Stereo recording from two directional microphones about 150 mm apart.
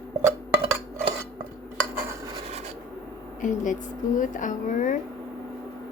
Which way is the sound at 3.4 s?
60° left (ahead or behind).